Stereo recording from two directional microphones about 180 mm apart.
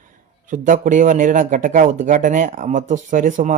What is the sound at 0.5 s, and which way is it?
Speech, 45° right (ahead or behind).